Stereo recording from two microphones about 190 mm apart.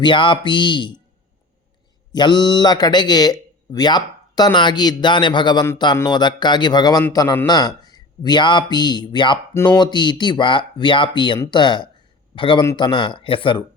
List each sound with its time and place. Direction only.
0.0 s speech: 25° left (ahead or behind)
2.1 s a man's voice: 25° left (ahead or behind)